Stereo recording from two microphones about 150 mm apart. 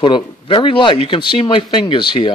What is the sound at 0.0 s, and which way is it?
Speech, 30° left (ahead or behind).